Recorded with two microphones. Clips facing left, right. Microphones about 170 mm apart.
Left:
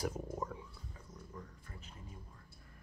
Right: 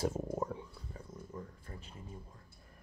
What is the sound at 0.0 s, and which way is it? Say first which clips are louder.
Stomach rumble: right 4 dB; 25° right (ahead or behind).